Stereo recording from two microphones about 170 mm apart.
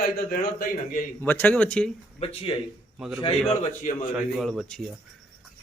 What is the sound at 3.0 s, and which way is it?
Speech, 5° right (ahead or behind).